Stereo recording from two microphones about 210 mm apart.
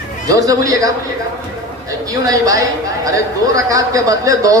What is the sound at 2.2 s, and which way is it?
Speech, 15° right (ahead or behind).